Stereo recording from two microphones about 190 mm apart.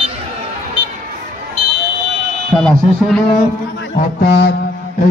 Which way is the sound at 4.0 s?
50° left (ahead or behind).